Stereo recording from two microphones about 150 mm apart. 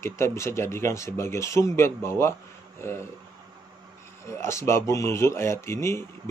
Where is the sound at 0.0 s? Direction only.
20° left (ahead or behind).